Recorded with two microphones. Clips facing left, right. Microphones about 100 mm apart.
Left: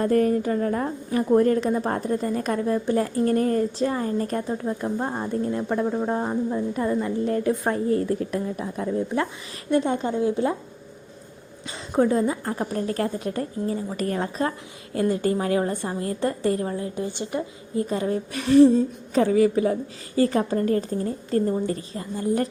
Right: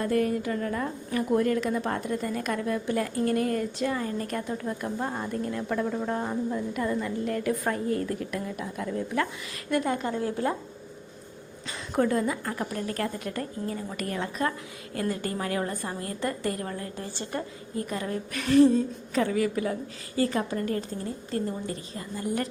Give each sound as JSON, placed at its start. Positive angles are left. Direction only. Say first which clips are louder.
{"t": 0.0, "sound": "a woman's voice", "louder": "left 5 dB", "side_deg": 40}
{"t": 11.9, "sound": "a woman's voice", "louder": "left 4 dB", "side_deg": 25}
{"t": 17.8, "sound": "a woman's voice", "louder": "left 6 dB", "side_deg": 30}
{"t": 19.1, "sound": "a woman's voice", "louder": "left 7 dB", "side_deg": 35}